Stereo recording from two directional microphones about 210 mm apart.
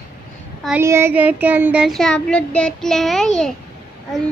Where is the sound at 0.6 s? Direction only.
10° right (ahead or behind).